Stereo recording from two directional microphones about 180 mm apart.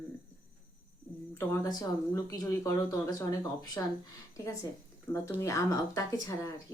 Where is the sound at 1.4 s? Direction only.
15° left (ahead or behind).